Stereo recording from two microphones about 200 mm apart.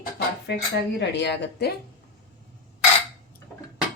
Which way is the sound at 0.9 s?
60° left (ahead or behind).